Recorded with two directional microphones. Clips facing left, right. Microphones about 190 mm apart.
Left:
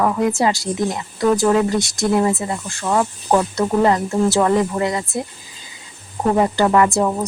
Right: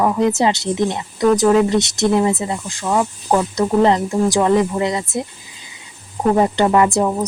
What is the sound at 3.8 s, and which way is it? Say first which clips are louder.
Speech: right 1 dB; 20° right (ahead or behind).